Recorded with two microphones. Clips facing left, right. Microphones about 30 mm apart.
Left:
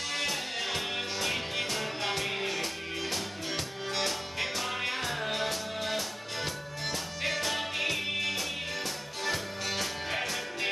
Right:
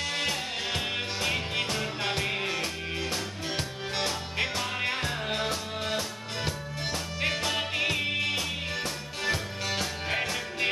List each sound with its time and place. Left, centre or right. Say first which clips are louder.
0.0 s music: right 2 dB; centre